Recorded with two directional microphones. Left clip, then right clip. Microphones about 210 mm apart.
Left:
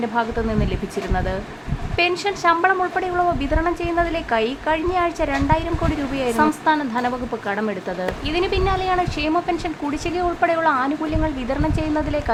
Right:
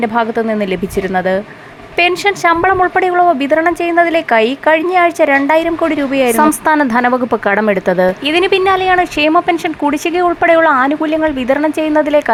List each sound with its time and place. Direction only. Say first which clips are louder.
0.0 s speech: right 8 dB; 25° right (ahead or behind)